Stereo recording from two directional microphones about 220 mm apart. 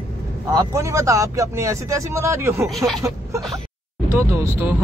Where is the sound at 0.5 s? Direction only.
15° right (ahead or behind).